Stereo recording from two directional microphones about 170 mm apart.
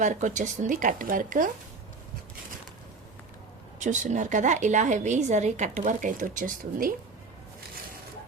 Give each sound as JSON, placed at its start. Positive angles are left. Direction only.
{"t": 0.0, "sound": "a woman's voice", "side_deg": -45}
{"t": 3.8, "sound": "a woman's voice", "side_deg": -45}